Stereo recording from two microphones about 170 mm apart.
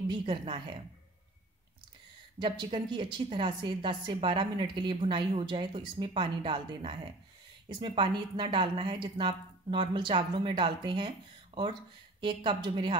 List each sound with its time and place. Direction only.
0.1 s a woman's voice: 30° right (ahead or behind)
2.3 s a woman's voice: 30° right (ahead or behind)